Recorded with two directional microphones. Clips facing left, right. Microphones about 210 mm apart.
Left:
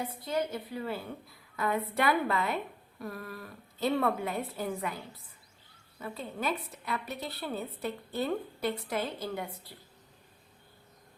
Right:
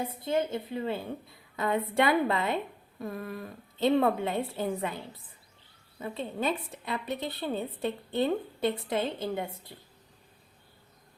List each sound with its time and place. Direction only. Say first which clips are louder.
0.2 s a woman's voice: right 4 dB; 25° right (ahead or behind)